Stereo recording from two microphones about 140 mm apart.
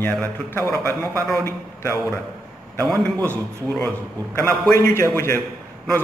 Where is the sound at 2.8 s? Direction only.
5° left (ahead or behind).